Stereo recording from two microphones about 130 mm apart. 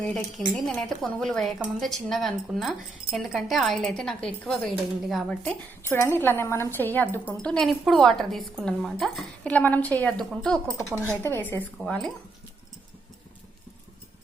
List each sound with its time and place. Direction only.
0.0 s speech: 5° left (ahead or behind)
5.8 s a woman's voice: 20° left (ahead or behind); by 9.5 s centre (ahead or behind)
9.5 s a woman's voice: 10° left (ahead or behind)
11.2 s a woman's voice: 15° left (ahead or behind)
11.8 s speech: 5° left (ahead or behind)